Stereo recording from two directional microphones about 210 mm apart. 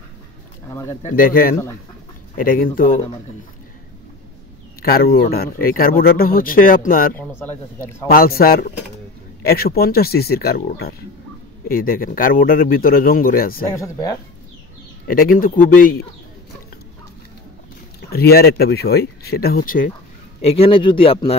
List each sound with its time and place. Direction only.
0.7 s speech: 15° left (ahead or behind)
1.1 s a man's voice: 40° left (ahead or behind)
4.8 s speech: 45° left (ahead or behind)
7.2 s speech: 10° left (ahead or behind)
8.1 s speech: 45° left (ahead or behind)
13.7 s speech: 15° left (ahead or behind)
15.0 s a man's voice: 40° left (ahead or behind)
18.1 s speech: 50° left (ahead or behind)
20.4 s speech: 25° left (ahead or behind)